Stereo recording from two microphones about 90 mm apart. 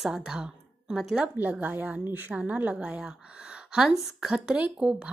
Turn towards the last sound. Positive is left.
turn(degrees=-10)  # may be behind; listen again after turning